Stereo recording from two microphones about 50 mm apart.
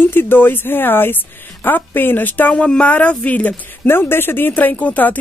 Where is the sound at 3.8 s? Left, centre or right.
Left.